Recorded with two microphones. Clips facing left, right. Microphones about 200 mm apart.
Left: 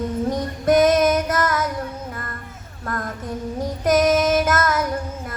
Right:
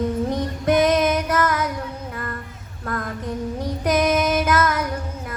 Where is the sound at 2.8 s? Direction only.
45° left (ahead or behind).